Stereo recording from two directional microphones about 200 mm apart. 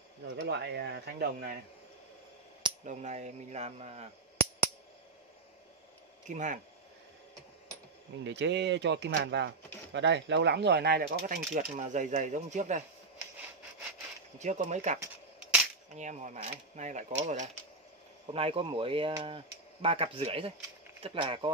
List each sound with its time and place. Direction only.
0.4 s speech: 60° right (ahead or behind)
2.8 s speech: 35° right (ahead or behind)
6.2 s speech: 40° right (ahead or behind)
8.2 s speech: 60° right (ahead or behind); by 12.8 s 35° right (ahead or behind)
14.4 s speech: 35° right (ahead or behind)